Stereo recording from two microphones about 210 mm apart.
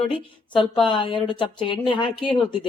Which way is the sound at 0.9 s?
20° left (ahead or behind).